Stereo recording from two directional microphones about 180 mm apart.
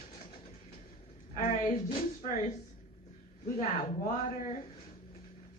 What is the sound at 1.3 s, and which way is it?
A woman's voice, 50° left (ahead or behind).